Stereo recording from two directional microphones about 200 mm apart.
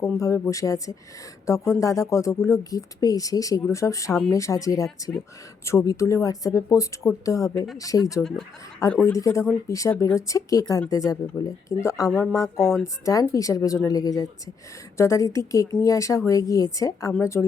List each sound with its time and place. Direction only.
0.0 s speech: 15° left (ahead or behind)
12.5 s speech: centre (ahead or behind)
12.8 s speech: 15° left (ahead or behind)